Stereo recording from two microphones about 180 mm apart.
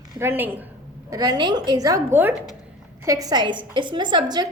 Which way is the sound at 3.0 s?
20° right (ahead or behind).